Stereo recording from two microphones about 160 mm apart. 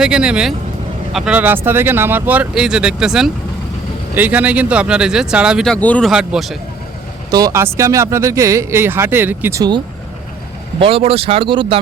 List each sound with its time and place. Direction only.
0.0 s speech: 5° right (ahead or behind)
5.7 s speech: 10° left (ahead or behind)
6.1 s speech: 5° right (ahead or behind)
7.3 s speech: 25° right (ahead or behind)
10.8 s speech: 35° right (ahead or behind)